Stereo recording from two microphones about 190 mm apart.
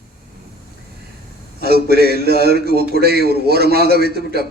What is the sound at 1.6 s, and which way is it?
A man's voice, 55° right (ahead or behind).